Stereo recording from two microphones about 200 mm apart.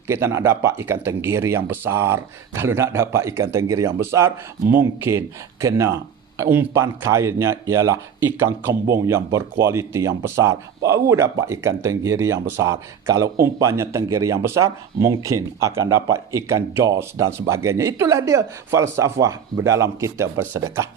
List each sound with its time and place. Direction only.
0.1 s speech: 15° right (ahead or behind)